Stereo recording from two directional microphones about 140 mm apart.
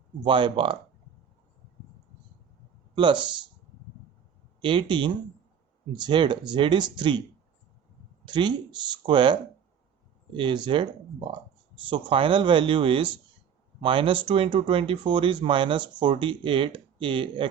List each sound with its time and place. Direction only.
0.2 s speech: 35° right (ahead or behind)
2.9 s speech: 35° right (ahead or behind)
4.6 s speech: 35° right (ahead or behind)
8.2 s speech: 35° right (ahead or behind)